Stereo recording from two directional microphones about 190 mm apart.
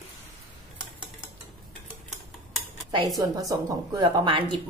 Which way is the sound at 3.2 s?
20° right (ahead or behind).